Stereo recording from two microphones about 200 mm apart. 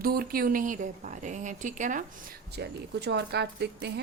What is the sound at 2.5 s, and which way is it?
Speech, 55° right (ahead or behind).